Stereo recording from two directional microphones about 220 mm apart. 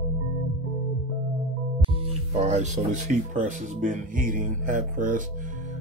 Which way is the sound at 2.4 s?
30° right (ahead or behind).